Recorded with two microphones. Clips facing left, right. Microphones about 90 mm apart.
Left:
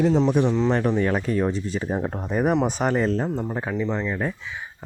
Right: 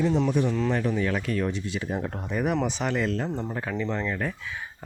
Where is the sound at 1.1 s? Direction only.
35° left (ahead or behind).